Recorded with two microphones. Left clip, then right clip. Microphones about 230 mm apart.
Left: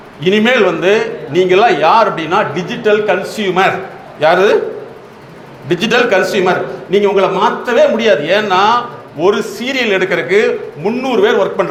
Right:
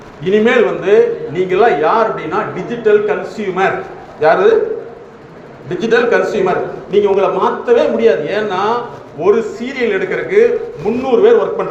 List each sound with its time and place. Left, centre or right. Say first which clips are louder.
0.3 s a man's voice: left 1 dB; left
5.6 s a man's voice: left 1 dB; left